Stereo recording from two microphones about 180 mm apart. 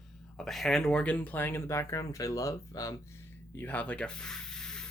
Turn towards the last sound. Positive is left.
turn(degrees=5)  # may be behind; listen again after turning